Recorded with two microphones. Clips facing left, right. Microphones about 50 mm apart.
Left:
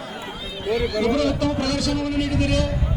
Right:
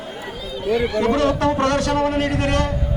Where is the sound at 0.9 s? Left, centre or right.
Right.